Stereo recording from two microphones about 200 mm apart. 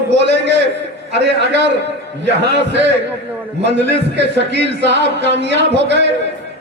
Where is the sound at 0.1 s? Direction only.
60° right (ahead or behind).